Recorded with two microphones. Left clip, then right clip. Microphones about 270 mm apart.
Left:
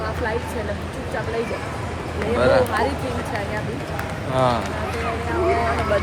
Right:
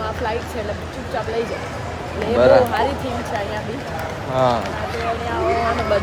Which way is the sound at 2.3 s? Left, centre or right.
Centre.